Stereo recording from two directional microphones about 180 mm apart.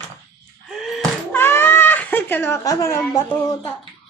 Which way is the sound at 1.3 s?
10° left (ahead or behind).